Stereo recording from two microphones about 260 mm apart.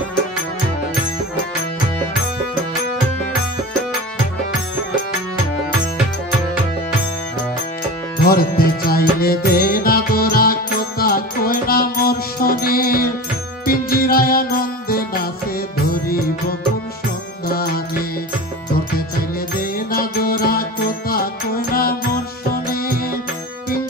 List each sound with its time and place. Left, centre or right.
8.2 s music: left
19.6 s music: left